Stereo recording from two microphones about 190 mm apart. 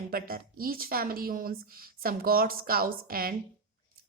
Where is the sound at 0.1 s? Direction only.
50° right (ahead or behind).